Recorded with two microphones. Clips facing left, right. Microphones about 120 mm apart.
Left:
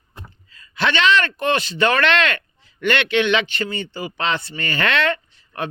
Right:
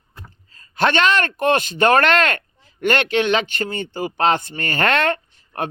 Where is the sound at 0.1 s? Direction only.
20° left (ahead or behind).